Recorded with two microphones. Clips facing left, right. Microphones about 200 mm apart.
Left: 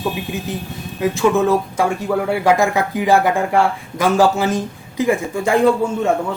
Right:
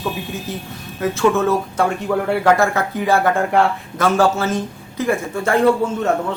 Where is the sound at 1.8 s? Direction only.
5° left (ahead or behind).